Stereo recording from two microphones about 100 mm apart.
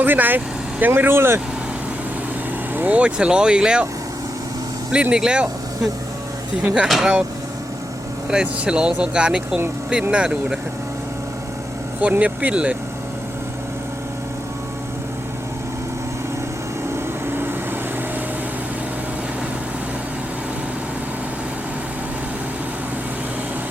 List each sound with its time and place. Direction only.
0.0 s speech: 20° right (ahead or behind)
2.7 s speech: 15° right (ahead or behind)
4.9 s speech: 10° right (ahead or behind)
6.8 s speech: 5° right (ahead or behind)
8.3 s speech: 10° right (ahead or behind)
11.9 s speech: 15° right (ahead or behind)
16.9 s vehicle: 20° right (ahead or behind)